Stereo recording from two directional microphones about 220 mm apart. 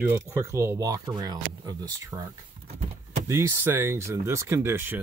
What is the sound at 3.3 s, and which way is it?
Speech, 10° right (ahead or behind).